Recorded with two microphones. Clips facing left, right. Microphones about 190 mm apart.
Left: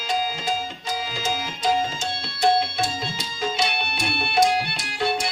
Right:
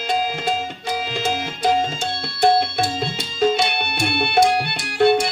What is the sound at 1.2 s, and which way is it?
Tabla, 60° right (ahead or behind).